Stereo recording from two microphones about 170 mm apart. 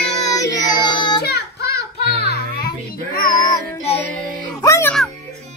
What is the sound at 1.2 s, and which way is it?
Child singing, 70° left (ahead or behind).